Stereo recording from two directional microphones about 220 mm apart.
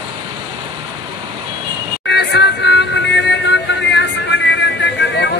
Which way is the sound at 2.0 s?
50° left (ahead or behind).